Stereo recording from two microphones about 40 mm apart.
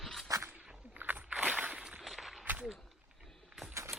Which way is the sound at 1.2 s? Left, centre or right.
Right.